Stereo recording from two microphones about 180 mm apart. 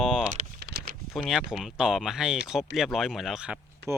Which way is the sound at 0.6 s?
55° right (ahead or behind).